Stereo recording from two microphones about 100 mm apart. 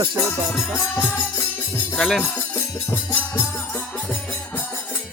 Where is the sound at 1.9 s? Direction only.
5° left (ahead or behind).